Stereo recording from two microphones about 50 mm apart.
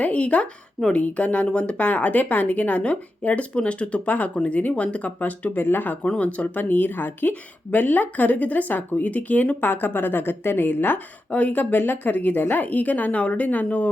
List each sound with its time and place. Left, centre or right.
0.0 s speech: left
6.0 s speech: left